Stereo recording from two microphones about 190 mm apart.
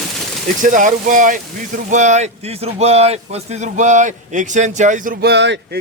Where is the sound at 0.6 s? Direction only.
45° right (ahead or behind).